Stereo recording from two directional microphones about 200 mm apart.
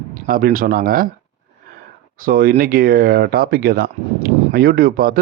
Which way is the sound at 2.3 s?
45° right (ahead or behind).